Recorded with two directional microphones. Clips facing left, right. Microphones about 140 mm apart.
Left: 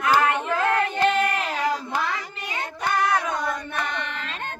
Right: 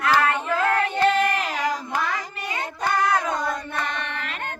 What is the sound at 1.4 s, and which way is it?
Child singing, 40° right (ahead or behind).